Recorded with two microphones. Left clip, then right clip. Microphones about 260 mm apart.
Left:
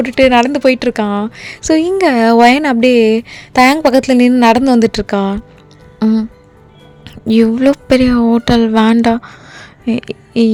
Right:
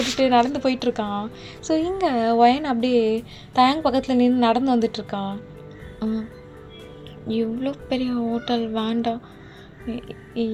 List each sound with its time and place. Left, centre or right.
0.2 s a woman's voice: left
7.4 s a woman's voice: left
9.9 s a woman's voice: left